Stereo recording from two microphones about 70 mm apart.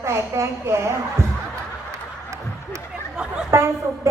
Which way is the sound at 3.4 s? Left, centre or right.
Right.